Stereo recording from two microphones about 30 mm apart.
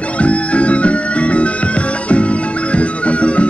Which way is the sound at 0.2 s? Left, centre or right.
Left.